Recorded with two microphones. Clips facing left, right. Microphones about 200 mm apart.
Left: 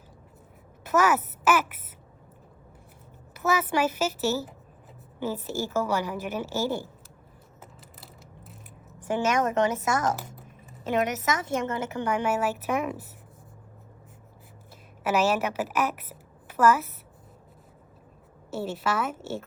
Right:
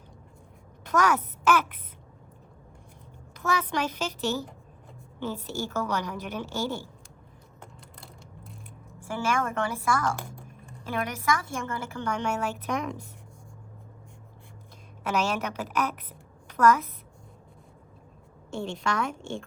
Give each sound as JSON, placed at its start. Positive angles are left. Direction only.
{"t": 0.9, "sound": "speech", "side_deg": 5}
{"t": 3.3, "sound": "a woman's voice", "side_deg": 5}
{"t": 7.6, "sound": "mechanisms", "side_deg": 5}
{"t": 9.1, "sound": "speech", "side_deg": 20}
{"t": 10.2, "sound": "typing", "side_deg": 5}
{"t": 10.8, "sound": "speech", "side_deg": 25}
{"t": 12.1, "sound": "a woman's voice", "side_deg": 5}
{"t": 15.0, "sound": "a woman's voice", "side_deg": 5}
{"t": 18.5, "sound": "a woman's voice", "side_deg": 5}